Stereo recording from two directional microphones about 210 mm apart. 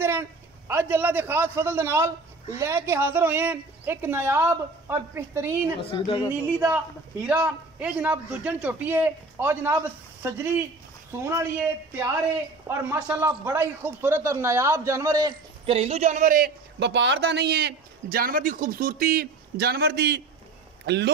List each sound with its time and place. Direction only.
0.0 s a man's voice: 10° right (ahead or behind)
5.8 s speech: 25° left (ahead or behind)
7.2 s a man's voice: 5° right (ahead or behind)
15.6 s a man's voice: 30° right (ahead or behind); by 21.1 s 55° right (ahead or behind)